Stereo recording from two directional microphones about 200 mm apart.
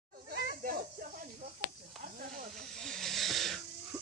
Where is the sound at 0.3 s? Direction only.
50° right (ahead or behind).